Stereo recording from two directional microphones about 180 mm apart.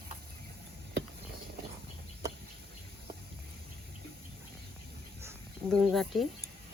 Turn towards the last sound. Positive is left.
turn(degrees=0)  # may be behind; listen again after turning